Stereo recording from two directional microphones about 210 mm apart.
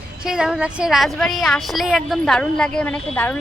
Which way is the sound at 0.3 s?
5° right (ahead or behind).